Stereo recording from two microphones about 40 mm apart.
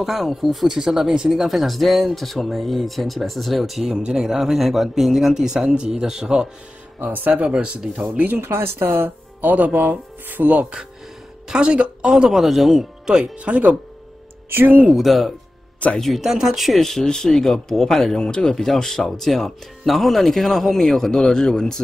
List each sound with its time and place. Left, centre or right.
0.0 s speech: centre
0.7 s speech: centre
1.3 s speech: centre
3.9 s a man's voice: centre
7.0 s speech: right
7.4 s speech: right
8.4 s speech: right
9.4 s speech: right
9.8 s speech: right
11.4 s speech: right
12.1 s a man's voice: centre
13.0 s speech: centre
13.4 s speech: right
15.0 s speech: centre